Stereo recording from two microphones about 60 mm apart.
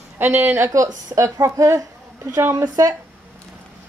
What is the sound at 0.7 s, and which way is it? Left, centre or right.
Speech, right.